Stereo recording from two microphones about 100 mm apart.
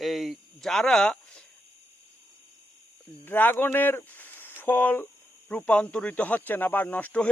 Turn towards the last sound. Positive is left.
turn(degrees=15)  # may be behind; listen again after turning